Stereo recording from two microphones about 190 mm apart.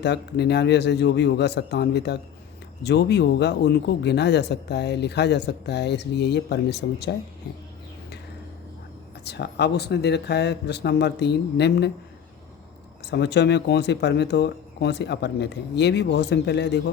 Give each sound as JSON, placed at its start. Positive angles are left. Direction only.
{"t": 0.0, "sound": "a man's voice", "side_deg": 60}
{"t": 9.2, "sound": "a man's voice", "side_deg": 60}
{"t": 13.1, "sound": "a man's voice", "side_deg": 65}